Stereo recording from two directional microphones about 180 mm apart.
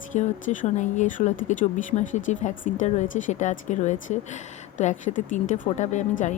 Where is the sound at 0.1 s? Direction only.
45° left (ahead or behind).